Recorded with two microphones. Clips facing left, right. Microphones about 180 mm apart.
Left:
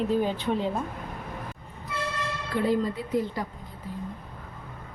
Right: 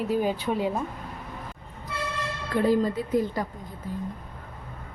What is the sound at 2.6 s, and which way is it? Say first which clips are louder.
Speech: right 3 dB; 45° right (ahead or behind).